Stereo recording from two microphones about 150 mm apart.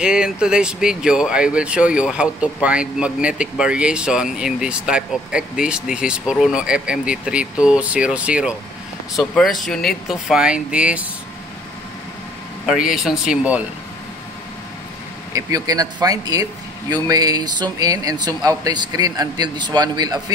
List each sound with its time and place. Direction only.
0.0 s speech: 5° right (ahead or behind)
12.6 s speech: 5° right (ahead or behind)
15.3 s speech: 25° right (ahead or behind)